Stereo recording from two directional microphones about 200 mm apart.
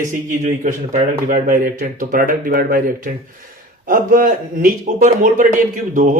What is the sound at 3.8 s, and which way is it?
A man's voice, 45° right (ahead or behind).